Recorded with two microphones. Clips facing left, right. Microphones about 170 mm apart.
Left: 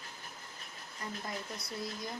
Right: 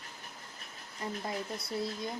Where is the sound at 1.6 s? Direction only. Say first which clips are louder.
Right 6 dB; 25° right (ahead or behind).